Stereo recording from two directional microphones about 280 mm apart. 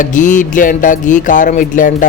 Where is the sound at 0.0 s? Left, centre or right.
Left.